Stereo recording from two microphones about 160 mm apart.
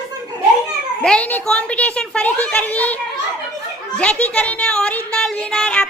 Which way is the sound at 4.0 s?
10° left (ahead or behind).